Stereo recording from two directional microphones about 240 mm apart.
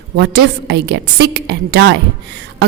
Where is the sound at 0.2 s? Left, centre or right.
Right.